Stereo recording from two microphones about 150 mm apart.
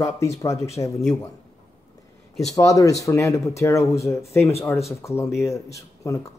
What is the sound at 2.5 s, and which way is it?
Speech, 20° left (ahead or behind).